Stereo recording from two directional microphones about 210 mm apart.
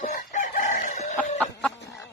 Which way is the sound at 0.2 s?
40° left (ahead or behind).